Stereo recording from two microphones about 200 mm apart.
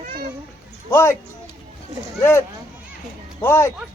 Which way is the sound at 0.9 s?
15° left (ahead or behind).